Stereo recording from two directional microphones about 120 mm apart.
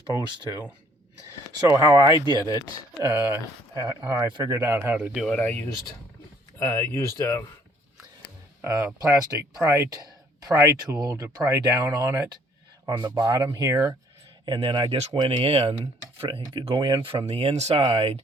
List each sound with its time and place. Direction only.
1.6 s speech: 25° right (ahead or behind)
4.9 s speech: 5° right (ahead or behind)
5.4 s speech: 15° left (ahead or behind)
8.6 s speech: 25° right (ahead or behind)
12.8 s speech: 40° right (ahead or behind)
14.4 s speech: 40° right (ahead or behind)
16.5 s speech: 40° right (ahead or behind); by 17.8 s 65° right (ahead or behind)
17.8 s speech: 45° right (ahead or behind)